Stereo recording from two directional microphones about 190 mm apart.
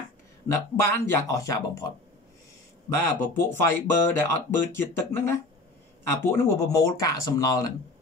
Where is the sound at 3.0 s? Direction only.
10° left (ahead or behind).